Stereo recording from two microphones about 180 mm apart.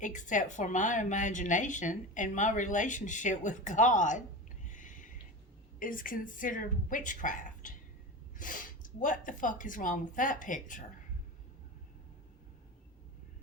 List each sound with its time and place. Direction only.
0.0 s speech: 45° left (ahead or behind)
4.6 s a sound: 45° left (ahead or behind)
5.8 s speech: 50° left (ahead or behind)